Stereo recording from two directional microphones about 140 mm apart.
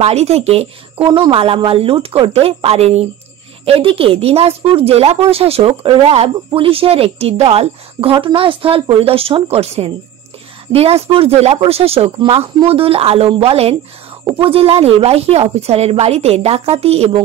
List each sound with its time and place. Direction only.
0.0 s speech: 50° right (ahead or behind)